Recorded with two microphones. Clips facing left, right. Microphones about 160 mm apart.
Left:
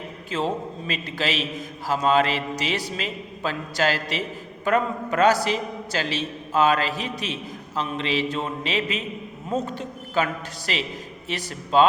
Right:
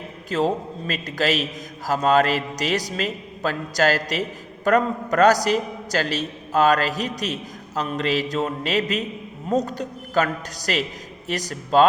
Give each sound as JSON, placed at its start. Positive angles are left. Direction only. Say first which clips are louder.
{"t": 0.3, "sound": "a man's voice", "louder": "right 4 dB", "side_deg": -40}